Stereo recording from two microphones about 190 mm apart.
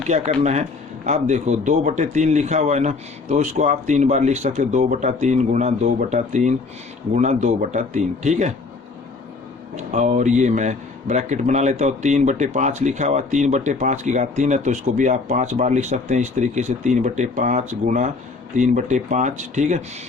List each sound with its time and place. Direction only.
0.1 s a man's voice: 35° right (ahead or behind)
9.7 s a man's voice: 40° right (ahead or behind)